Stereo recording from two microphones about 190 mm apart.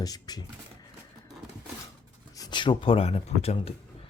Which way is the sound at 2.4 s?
25° left (ahead or behind).